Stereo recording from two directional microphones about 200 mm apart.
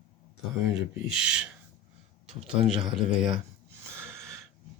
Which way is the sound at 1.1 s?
5° right (ahead or behind).